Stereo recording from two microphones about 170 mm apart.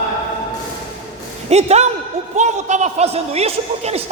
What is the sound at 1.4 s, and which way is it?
A man's voice, 40° right (ahead or behind).